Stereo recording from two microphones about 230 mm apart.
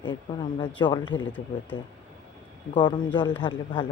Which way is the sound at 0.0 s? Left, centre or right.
Centre.